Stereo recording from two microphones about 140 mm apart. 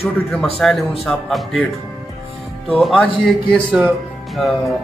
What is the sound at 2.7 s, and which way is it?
Speech, centre (ahead or behind).